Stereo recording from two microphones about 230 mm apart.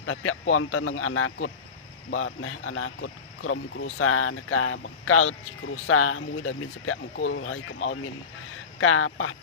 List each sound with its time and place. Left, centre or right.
0.0 s speech: left